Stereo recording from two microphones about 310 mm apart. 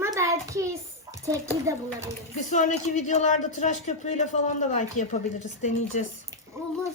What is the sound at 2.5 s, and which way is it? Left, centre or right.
Speech, left.